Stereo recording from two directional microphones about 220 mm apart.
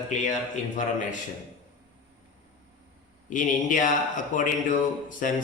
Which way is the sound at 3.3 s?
35° left (ahead or behind).